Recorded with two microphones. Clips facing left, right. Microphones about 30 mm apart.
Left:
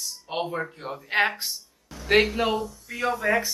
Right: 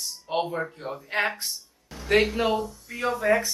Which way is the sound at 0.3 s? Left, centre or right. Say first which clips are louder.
Right 2 dB; centre.